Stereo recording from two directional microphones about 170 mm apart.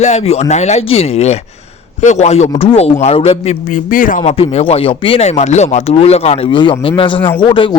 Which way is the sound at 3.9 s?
50° left (ahead or behind).